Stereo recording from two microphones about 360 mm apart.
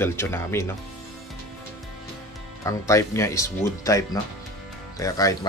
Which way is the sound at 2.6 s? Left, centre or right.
Centre.